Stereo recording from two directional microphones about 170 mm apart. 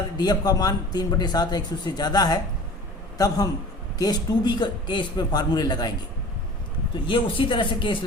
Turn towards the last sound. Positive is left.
turn(degrees=30)  # may be behind; listen again after turning